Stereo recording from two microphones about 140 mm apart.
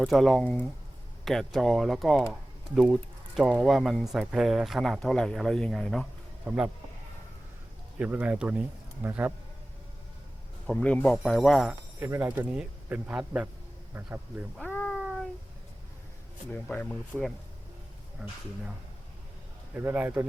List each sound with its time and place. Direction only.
0.0 s speech: centre (ahead or behind)
7.9 s a man's voice: 10° right (ahead or behind)
10.7 s speech: 5° left (ahead or behind)
11.7 s a man's voice: 20° right (ahead or behind)
14.7 s cat: 15° left (ahead or behind)
16.5 s speech: 10° left (ahead or behind)
19.7 s a man's voice: 15° right (ahead or behind)